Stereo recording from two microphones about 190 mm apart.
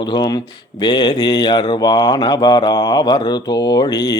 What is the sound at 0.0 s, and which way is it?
Mantra, 20° left (ahead or behind).